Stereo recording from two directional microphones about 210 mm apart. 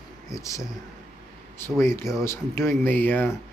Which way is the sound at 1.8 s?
10° left (ahead or behind).